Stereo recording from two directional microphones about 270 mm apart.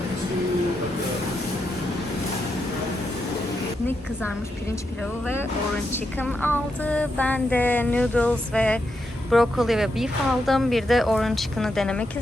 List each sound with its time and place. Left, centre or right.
5.9 s speech: centre